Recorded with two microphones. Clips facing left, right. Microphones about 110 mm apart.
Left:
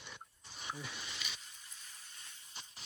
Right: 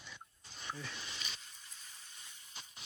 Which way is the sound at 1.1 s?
Centre (ahead or behind).